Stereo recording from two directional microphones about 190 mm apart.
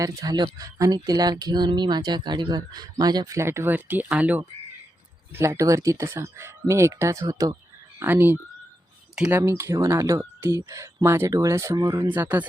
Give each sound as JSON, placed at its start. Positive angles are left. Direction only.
{"t": 0.0, "sound": "speech", "side_deg": -15}
{"t": 9.4, "sound": "speech", "side_deg": -15}